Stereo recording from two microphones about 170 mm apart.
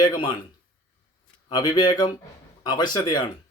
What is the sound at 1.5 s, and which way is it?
Speech, 25° left (ahead or behind).